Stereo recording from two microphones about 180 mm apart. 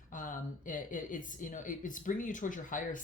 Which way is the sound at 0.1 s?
50° left (ahead or behind).